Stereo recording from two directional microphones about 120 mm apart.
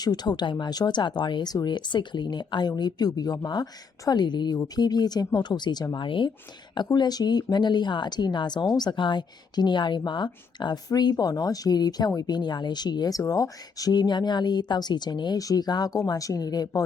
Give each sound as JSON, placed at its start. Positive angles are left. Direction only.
{"t": 0.0, "sound": "speech", "side_deg": 35}